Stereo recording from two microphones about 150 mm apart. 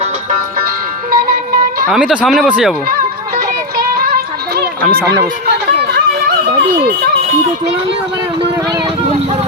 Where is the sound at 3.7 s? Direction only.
80° right.